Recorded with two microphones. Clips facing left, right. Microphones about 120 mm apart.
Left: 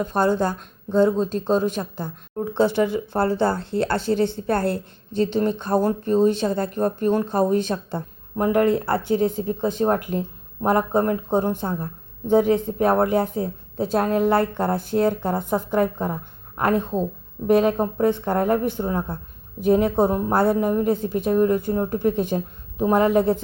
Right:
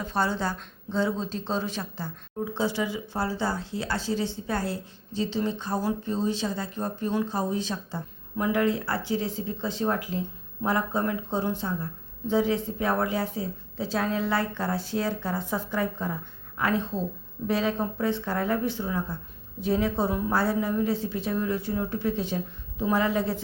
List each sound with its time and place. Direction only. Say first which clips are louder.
0.0 s speech: left 7 dB; 50° left (ahead or behind)
8.4 s a woman's voice: left 6 dB; 45° left (ahead or behind)